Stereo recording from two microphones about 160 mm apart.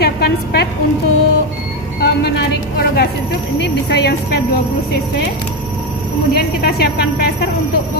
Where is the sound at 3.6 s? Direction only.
90° left.